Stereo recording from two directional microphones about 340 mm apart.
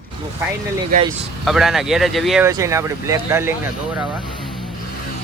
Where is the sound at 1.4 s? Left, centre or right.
Centre.